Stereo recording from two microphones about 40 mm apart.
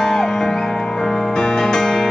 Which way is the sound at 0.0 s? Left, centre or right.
Centre.